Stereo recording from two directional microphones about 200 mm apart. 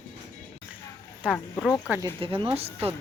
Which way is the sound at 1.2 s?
5° right (ahead or behind).